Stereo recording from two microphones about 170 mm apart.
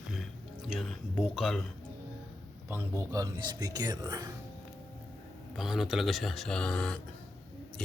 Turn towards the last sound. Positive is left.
turn(degrees=5)  # may be behind; listen again after turning